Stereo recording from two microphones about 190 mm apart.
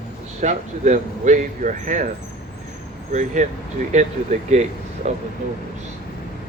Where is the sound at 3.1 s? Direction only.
40° right (ahead or behind).